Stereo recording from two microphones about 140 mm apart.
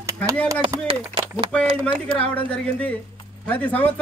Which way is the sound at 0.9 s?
40° right (ahead or behind).